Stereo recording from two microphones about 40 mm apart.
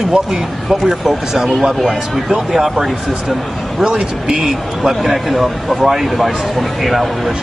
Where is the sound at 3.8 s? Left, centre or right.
Centre.